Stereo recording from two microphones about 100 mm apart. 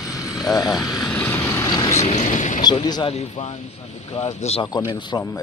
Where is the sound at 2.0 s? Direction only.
90° left.